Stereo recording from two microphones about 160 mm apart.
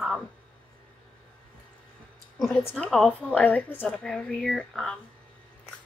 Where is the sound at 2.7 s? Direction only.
5° left (ahead or behind).